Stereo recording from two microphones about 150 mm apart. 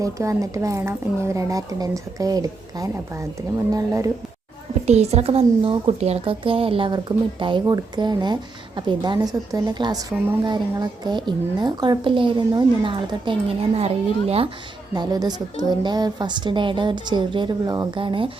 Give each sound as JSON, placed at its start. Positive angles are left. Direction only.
{"t": 0.0, "sound": "a woman's voice", "side_deg": -20}
{"t": 4.9, "sound": "a woman's voice", "side_deg": -45}
{"t": 14.9, "sound": "a woman's voice", "side_deg": -25}